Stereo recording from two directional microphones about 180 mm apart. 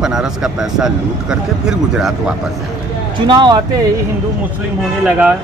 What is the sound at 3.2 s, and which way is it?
Speech, 25° right (ahead or behind).